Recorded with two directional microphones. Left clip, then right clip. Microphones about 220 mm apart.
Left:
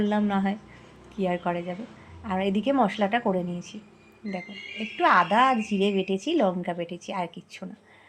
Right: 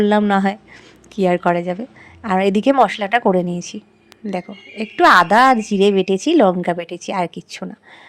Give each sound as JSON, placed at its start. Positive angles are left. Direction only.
{"t": 0.0, "sound": "a woman's voice", "side_deg": -55}